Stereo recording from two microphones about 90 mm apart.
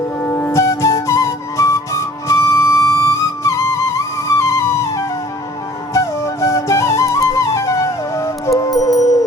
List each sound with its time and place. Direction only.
0.2 s flute: 25° left (ahead or behind); by 9.0 s 45° left (ahead or behind)